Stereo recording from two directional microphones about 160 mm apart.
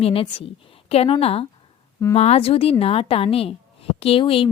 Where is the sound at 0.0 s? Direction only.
35° left (ahead or behind).